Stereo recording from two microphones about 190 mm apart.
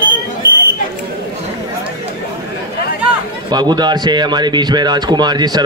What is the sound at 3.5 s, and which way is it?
A man's voice, 20° right (ahead or behind).